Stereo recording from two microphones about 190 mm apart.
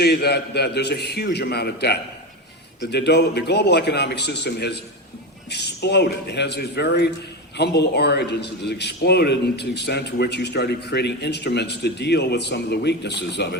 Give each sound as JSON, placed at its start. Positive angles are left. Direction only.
{"t": 0.0, "sound": "a man's voice", "side_deg": 60}